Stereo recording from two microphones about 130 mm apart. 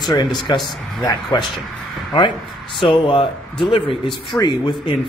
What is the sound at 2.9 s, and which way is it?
A man's voice, 45° left (ahead or behind).